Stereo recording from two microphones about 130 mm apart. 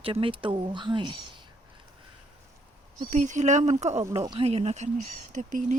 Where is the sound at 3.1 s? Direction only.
70° right (ahead or behind).